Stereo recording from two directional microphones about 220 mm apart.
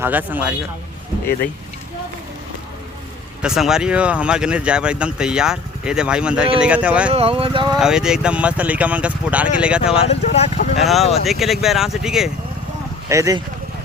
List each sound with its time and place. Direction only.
0.0 s a man's voice: 10° right (ahead or behind)
3.4 s speech: centre (ahead or behind)
7.1 s speech: 25° right (ahead or behind)
7.8 s speech: 5° right (ahead or behind)
9.9 s speech: 25° left (ahead or behind)
10.8 s speech: centre (ahead or behind)
13.1 s a man's voice: 15° right (ahead or behind)